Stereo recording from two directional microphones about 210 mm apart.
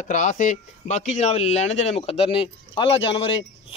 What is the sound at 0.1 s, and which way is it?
Speech, 35° left (ahead or behind).